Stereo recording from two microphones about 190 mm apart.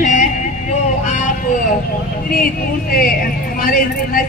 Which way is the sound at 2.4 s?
50° left (ahead or behind).